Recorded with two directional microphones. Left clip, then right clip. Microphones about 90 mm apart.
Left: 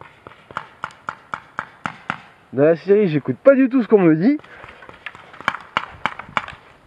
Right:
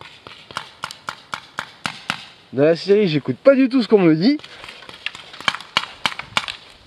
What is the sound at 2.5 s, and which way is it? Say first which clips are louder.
Speech: even; 25° right (ahead or behind).